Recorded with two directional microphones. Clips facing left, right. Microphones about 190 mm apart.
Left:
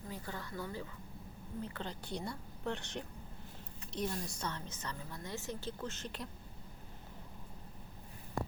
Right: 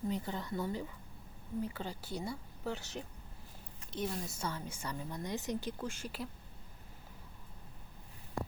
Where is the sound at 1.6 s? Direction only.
10° right (ahead or behind).